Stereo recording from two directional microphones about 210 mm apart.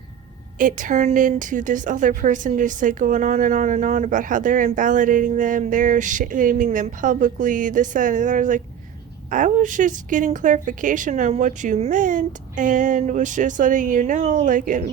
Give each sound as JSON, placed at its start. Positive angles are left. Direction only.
{"t": 0.6, "sound": "a woman's voice", "side_deg": -40}